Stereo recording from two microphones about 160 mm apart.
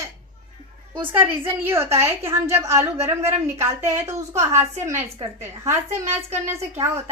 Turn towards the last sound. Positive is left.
turn(degrees=-20)  # may be behind; listen again after turning